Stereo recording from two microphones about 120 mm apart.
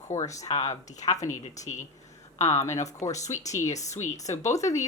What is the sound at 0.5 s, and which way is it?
Speech, 65° left (ahead or behind).